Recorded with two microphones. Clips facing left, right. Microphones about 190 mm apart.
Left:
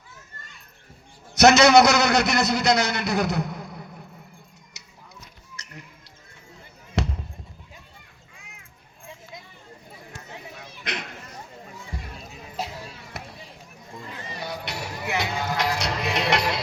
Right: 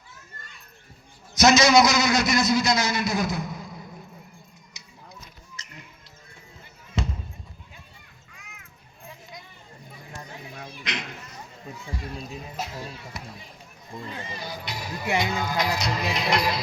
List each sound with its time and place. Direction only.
1.4 s a man's voice: 65° left (ahead or behind)
4.7 s a sound: 65° left (ahead or behind)
5.6 s music: 70° left (ahead or behind)
7.0 s basketball bounce: 70° left (ahead or behind)
13.1 s run: 65° left (ahead or behind)
14.4 s music: 70° left (ahead or behind)